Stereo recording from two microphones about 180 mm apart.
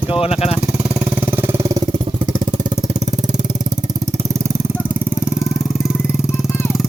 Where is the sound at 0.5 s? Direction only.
10° right (ahead or behind).